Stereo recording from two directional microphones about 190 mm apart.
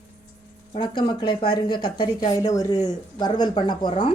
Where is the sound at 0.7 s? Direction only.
25° left (ahead or behind).